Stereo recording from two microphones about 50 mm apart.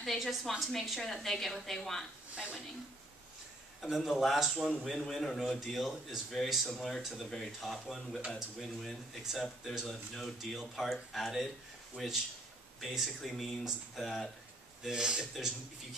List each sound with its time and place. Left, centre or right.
0.0 s a woman's voice: centre
2.3 s speech: centre
3.9 s a woman's voice: centre
14.9 s a man's voice: centre